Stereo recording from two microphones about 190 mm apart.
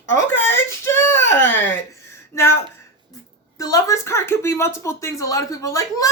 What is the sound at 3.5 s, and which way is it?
Speech, 20° left (ahead or behind).